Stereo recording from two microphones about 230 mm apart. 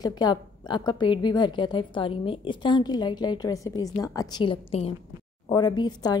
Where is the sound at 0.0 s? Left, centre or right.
Centre.